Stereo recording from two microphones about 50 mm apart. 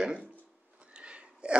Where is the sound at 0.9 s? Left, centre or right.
Right.